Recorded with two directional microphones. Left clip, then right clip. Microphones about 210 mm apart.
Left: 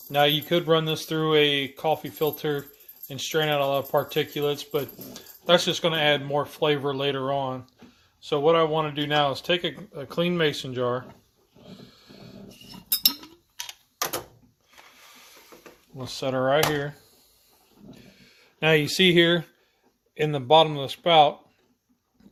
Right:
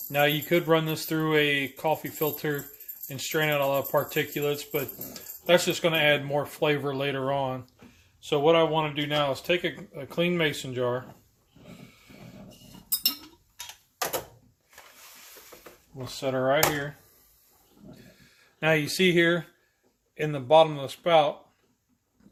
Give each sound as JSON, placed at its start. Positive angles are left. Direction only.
{"t": 0.1, "sound": "speech", "side_deg": 20}
{"t": 16.0, "sound": "speech", "side_deg": 35}
{"t": 17.9, "sound": "a sound", "side_deg": 35}
{"t": 20.1, "sound": "speech", "side_deg": 30}